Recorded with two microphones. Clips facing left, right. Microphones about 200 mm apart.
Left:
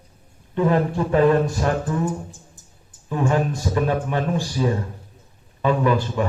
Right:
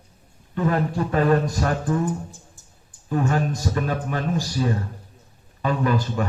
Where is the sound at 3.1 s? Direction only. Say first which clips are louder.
Left 1 dB; 40° right (ahead or behind).